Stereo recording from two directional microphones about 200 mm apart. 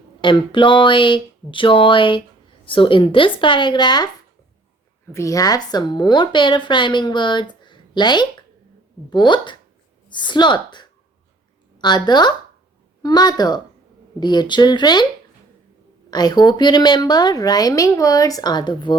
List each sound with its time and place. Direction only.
0.2 s speech: 25° left (ahead or behind)
5.1 s speech: 15° left (ahead or behind)
16.0 s speech: 20° left (ahead or behind)